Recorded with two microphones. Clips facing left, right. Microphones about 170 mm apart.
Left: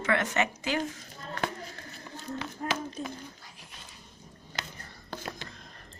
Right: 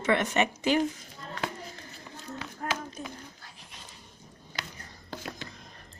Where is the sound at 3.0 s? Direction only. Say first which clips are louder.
Left 3 dB; 5° right (ahead or behind).